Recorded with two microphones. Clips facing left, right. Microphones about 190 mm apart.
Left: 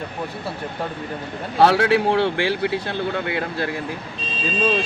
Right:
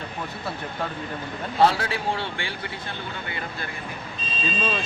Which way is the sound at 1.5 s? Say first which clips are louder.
Left 6 dB; 75° left (ahead or behind).